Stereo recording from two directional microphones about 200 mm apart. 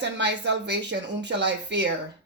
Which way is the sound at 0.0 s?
60° right (ahead or behind).